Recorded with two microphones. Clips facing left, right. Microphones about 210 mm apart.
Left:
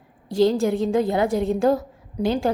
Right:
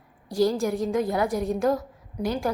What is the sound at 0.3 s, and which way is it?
A woman's voice, 25° left (ahead or behind).